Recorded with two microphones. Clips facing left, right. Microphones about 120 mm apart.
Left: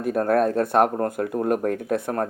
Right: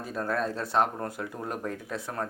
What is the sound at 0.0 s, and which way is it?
Speech, 60° left (ahead or behind).